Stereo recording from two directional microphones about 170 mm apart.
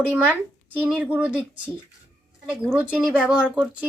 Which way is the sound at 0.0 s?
10° right (ahead or behind).